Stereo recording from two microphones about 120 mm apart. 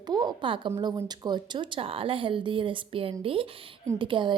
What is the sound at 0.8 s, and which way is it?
Speech, 35° right (ahead or behind).